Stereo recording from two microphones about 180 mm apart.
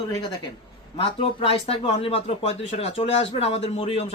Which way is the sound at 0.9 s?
30° left (ahead or behind).